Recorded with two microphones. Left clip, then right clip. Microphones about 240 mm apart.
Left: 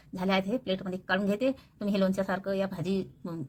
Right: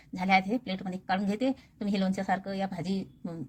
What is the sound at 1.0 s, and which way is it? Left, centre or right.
Speech, right.